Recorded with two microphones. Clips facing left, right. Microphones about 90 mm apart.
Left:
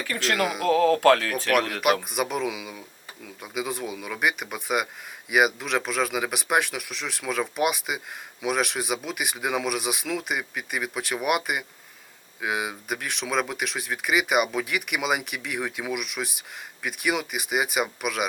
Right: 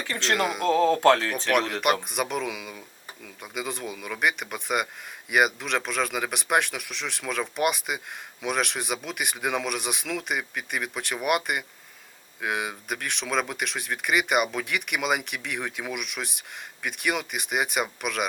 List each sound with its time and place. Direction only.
0.0 s speech: 25° right (ahead or behind)
0.3 s speech: centre (ahead or behind)
0.7 s speech: 25° right (ahead or behind)
1.8 s speech: centre (ahead or behind)